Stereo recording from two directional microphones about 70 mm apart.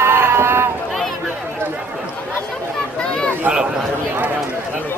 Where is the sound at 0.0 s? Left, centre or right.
Right.